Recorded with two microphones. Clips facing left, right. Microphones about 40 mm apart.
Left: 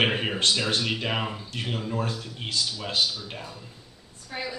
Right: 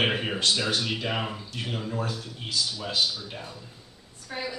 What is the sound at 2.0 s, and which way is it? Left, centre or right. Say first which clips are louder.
Speech: left 1 dB; left.